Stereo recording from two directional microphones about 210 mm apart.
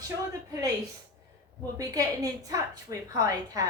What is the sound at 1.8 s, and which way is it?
Speech, 15° right (ahead or behind).